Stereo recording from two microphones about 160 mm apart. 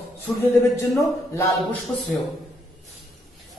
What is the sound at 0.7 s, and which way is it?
Speech, 15° left (ahead or behind).